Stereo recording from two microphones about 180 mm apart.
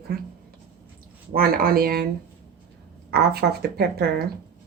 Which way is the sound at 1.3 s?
55° right (ahead or behind).